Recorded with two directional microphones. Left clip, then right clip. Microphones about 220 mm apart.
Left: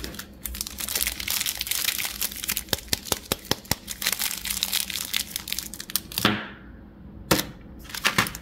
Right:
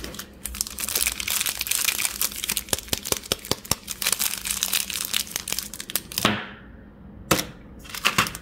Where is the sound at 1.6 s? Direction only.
15° right (ahead or behind).